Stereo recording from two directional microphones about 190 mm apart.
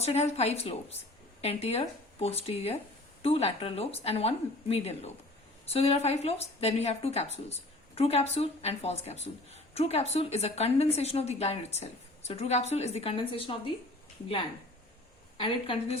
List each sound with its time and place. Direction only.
0.0 s a woman's voice: 35° left (ahead or behind)
15.4 s a woman's voice: 30° left (ahead or behind)